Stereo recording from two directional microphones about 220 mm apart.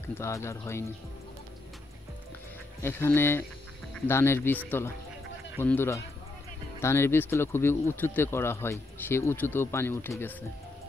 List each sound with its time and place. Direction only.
0.0 s speech: 10° left (ahead or behind)
2.8 s speech: 10° left (ahead or behind)